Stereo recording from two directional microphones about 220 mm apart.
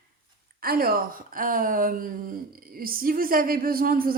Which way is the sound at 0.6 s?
45° right (ahead or behind).